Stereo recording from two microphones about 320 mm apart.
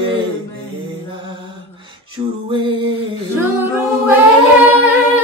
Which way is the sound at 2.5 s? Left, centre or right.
Centre.